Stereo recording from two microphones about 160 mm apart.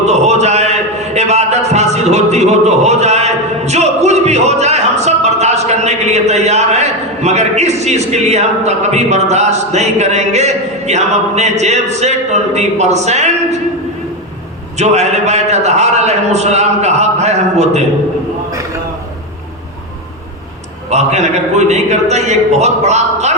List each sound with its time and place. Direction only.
0.0 s a man's voice: 45° right (ahead or behind)
14.8 s a man's voice: 45° right (ahead or behind)
20.9 s a man's voice: 45° right (ahead or behind)